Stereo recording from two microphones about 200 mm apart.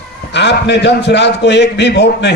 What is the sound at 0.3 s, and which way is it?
A man's voice, 60° left (ahead or behind).